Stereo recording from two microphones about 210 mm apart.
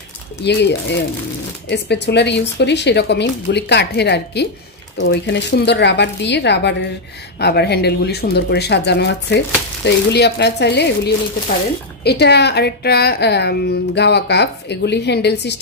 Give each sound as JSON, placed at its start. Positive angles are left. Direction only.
{"t": 0.4, "sound": "a woman's voice", "side_deg": 55}